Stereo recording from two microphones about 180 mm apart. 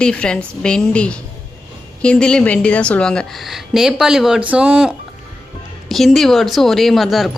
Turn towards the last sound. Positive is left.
turn(degrees=0)  # may be behind; listen again after turning